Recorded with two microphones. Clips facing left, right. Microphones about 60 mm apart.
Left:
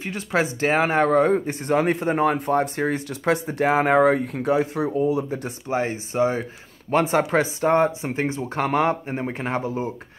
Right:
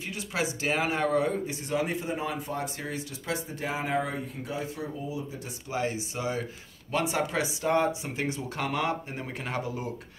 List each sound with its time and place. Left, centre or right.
0.0 s speech: left
5.7 s speech: left